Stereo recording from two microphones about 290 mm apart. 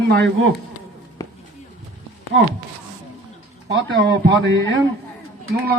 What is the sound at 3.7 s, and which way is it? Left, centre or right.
Speech, right.